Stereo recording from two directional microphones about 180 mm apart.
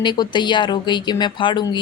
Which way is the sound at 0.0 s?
25° left (ahead or behind).